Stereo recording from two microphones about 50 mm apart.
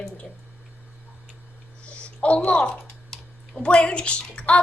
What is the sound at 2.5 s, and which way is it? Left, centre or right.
A child's voice, left.